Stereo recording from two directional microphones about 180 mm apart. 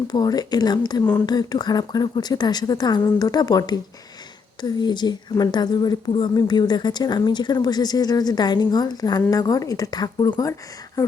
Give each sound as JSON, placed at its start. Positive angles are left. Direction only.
{"t": 0.1, "sound": "speech", "side_deg": 20}